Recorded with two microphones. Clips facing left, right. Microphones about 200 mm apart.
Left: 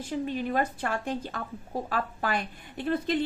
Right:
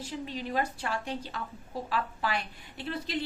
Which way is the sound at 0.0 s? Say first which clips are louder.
Left 6 dB; 55° left (ahead or behind).